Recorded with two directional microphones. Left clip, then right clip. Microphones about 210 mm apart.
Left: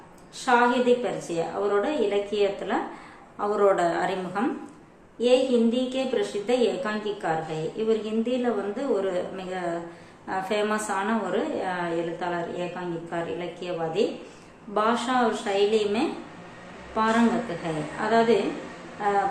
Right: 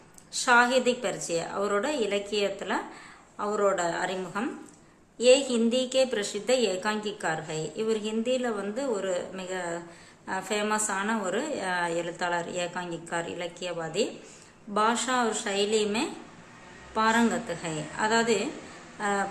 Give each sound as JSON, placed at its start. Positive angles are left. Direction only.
{"t": 0.3, "sound": "a woman's voice", "side_deg": -15}